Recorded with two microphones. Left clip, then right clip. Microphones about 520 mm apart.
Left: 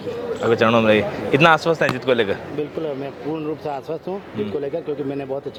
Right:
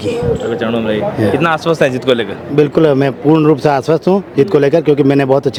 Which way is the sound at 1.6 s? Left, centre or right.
Centre.